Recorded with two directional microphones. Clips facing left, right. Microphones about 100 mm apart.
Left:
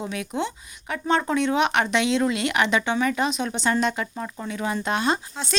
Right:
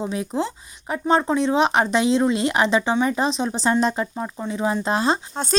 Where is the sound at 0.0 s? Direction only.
30° right (ahead or behind).